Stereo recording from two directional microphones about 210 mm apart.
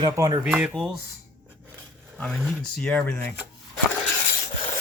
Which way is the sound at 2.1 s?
Centre (ahead or behind).